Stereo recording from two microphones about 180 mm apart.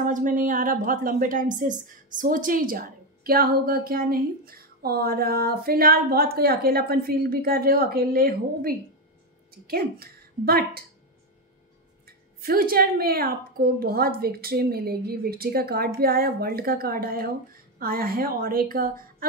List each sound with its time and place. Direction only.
0.0 s a woman's voice: 45° right (ahead or behind)
12.4 s a woman's voice: 55° right (ahead or behind)